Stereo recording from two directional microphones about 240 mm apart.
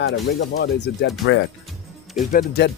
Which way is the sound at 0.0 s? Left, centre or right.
Left.